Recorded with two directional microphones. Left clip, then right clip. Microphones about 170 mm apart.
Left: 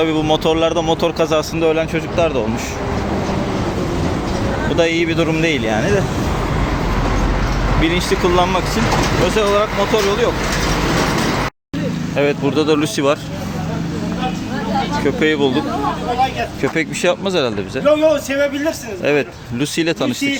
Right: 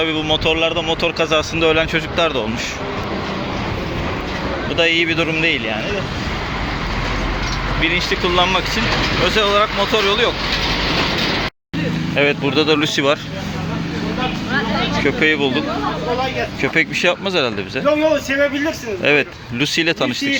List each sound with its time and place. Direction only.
0.0 s speech: 15° left (ahead or behind)
0.4 s speech: 30° left (ahead or behind)
1.2 s speech: 15° left (ahead or behind)
4.8 s speech: 15° left (ahead or behind)
7.8 s speech: 20° left (ahead or behind); by 10.3 s centre (ahead or behind)
12.1 s speech: 5° left (ahead or behind)
15.0 s speech: 15° left (ahead or behind)
16.6 s speech: 5° left (ahead or behind)
17.8 s a man's voice: 50° left (ahead or behind)
19.0 s speech: 5° left (ahead or behind)